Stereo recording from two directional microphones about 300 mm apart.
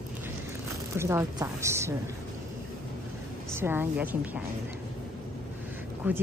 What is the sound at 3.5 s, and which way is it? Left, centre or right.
Speech, centre.